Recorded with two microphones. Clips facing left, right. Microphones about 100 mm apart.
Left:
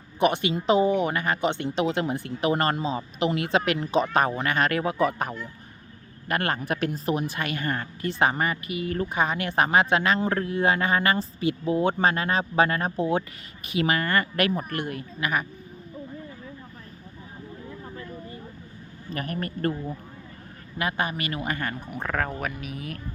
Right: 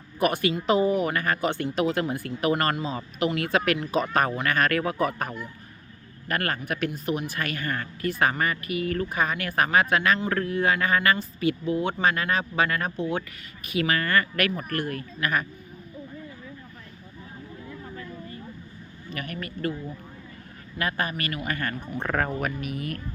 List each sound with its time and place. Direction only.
0.2 s speech: 25° left (ahead or behind)
19.1 s speech: 35° left (ahead or behind)
20.7 s speech: 20° left (ahead or behind)
22.0 s speech: 5° right (ahead or behind)